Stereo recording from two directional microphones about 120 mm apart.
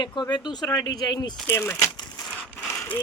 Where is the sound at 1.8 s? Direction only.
35° left (ahead or behind).